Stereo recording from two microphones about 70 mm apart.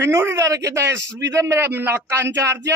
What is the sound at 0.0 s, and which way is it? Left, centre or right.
A man's voice, right.